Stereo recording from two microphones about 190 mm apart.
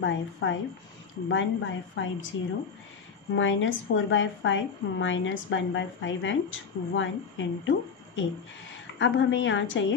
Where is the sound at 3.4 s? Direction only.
85° left.